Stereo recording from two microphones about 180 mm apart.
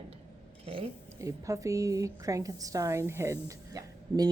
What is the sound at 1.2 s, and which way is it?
A woman's voice, 20° right (ahead or behind).